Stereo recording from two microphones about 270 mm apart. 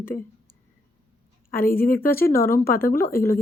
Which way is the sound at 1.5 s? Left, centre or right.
Left.